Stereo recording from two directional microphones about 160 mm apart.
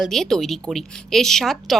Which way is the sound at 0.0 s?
Centre (ahead or behind).